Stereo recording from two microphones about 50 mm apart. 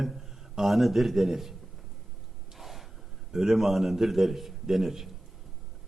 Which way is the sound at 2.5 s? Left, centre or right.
Centre.